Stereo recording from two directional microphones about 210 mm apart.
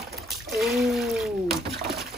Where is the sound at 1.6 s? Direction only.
50° right (ahead or behind).